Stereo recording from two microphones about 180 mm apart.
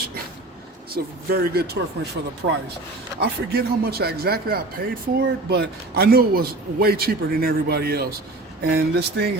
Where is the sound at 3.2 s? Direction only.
60° right (ahead or behind).